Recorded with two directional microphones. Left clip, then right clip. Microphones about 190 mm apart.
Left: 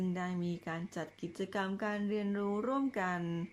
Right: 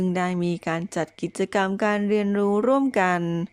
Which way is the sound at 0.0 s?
40° right (ahead or behind).